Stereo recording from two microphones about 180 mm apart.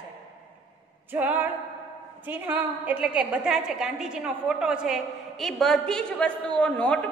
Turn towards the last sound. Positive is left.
turn(degrees=5)  # may be behind; listen again after turning